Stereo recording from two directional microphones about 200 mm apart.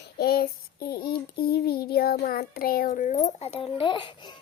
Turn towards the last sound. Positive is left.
turn(degrees=25)  # may be behind; listen again after turning